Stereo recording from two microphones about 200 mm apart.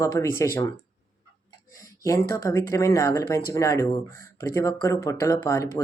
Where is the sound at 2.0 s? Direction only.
15° left (ahead or behind).